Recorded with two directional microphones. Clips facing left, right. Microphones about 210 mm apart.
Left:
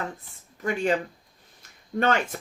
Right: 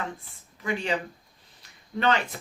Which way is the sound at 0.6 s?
45° left (ahead or behind).